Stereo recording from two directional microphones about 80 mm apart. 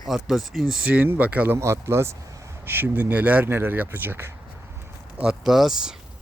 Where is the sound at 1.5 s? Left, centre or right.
Right.